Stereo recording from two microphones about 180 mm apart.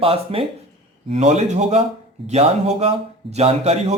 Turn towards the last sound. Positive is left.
turn(degrees=-35)  # may be behind; listen again after turning